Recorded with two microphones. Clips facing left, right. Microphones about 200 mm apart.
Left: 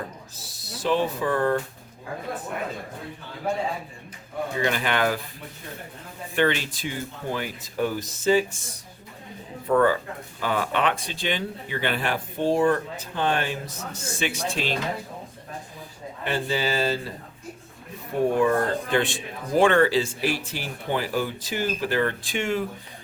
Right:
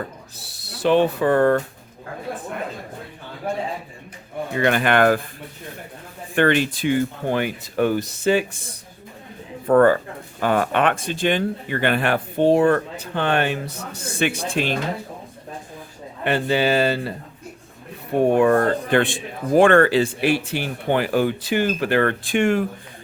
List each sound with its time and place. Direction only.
0.3 s speech: 65° right (ahead or behind)
4.5 s speech: 60° right (ahead or behind)
6.3 s speech: 55° right (ahead or behind)
9.6 s speech: 50° right (ahead or behind)
16.2 s speech: 65° right (ahead or behind)
18.3 s speech: 65° right (ahead or behind)